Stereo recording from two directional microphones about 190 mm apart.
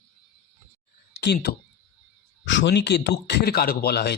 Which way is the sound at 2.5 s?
70° left (ahead or behind).